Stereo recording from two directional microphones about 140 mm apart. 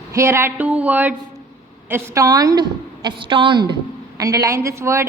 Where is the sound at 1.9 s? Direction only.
25° right (ahead or behind).